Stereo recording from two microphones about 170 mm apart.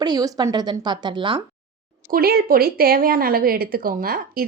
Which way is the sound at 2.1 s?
65° right (ahead or behind).